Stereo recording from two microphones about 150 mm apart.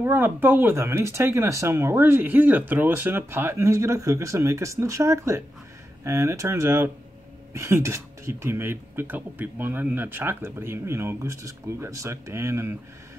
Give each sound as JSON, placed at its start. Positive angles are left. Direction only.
{"t": 0.0, "sound": "speech", "side_deg": -15}